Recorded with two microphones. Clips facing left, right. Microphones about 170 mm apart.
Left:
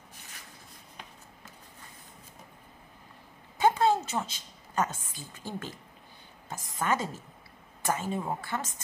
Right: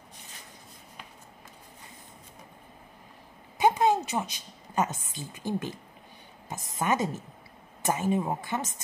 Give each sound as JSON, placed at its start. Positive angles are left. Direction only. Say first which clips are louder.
{"t": 3.5, "sound": "a woman's voice", "louder": "right 1 dB", "side_deg": -15}
{"t": 6.8, "sound": "speech", "louder": "right 3 dB", "side_deg": -15}